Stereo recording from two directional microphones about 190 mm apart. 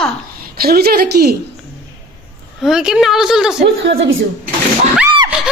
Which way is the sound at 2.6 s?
5° right (ahead or behind).